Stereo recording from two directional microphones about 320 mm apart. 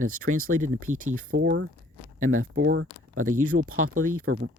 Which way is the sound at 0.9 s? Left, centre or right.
Right.